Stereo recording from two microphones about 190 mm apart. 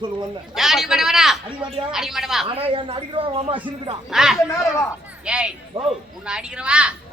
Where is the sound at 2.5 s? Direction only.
30° right (ahead or behind).